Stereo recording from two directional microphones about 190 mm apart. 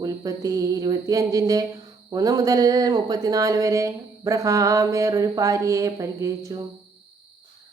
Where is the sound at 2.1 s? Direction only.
20° right (ahead or behind).